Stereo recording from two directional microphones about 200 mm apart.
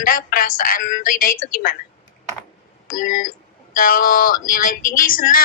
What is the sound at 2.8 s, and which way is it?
Speech, 40° left (ahead or behind).